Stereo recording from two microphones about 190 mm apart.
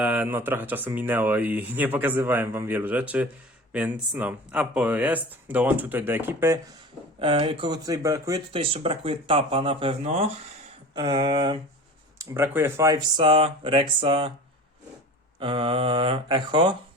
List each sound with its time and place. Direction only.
0.0 s speech: 10° right (ahead or behind)
7.2 s speech: 30° right (ahead or behind)
8.5 s speech: 30° right (ahead or behind)
10.9 s speech: 25° right (ahead or behind)
15.4 s speech: 30° right (ahead or behind)